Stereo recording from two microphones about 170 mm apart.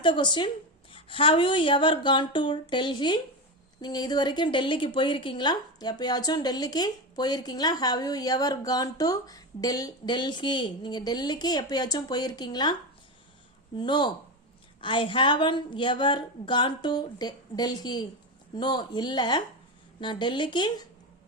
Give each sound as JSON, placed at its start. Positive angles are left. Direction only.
{"t": 0.0, "sound": "a woman's voice", "side_deg": 25}
{"t": 13.7, "sound": "a woman's voice", "side_deg": 25}